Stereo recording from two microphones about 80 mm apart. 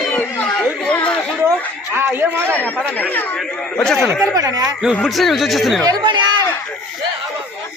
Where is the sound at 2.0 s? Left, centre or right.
Right.